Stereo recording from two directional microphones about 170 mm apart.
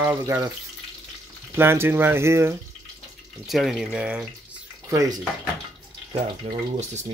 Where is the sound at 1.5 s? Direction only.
15° right (ahead or behind).